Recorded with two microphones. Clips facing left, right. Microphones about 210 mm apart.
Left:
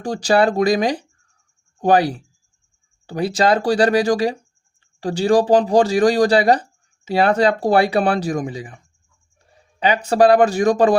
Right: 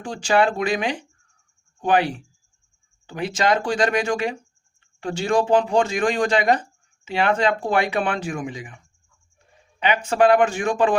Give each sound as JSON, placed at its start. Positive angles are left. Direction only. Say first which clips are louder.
{"t": 0.0, "sound": "speech", "louder": "left 4 dB", "side_deg": 40}
{"t": 9.8, "sound": "speech", "louder": "left 4 dB", "side_deg": 35}